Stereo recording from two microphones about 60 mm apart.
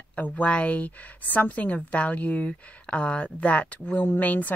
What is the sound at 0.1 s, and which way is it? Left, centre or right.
Speech, left.